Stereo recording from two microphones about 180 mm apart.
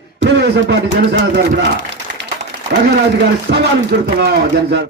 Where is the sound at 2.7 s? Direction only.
70° right (ahead or behind).